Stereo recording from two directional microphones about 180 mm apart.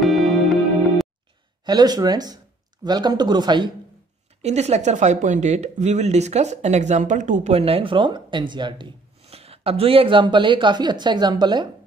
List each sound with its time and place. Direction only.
0.0 s music: centre (ahead or behind)
1.7 s speech: 20° right (ahead or behind)
4.4 s speech: 35° right (ahead or behind)